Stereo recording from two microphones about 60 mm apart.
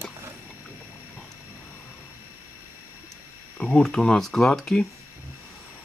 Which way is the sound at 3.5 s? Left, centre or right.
Centre.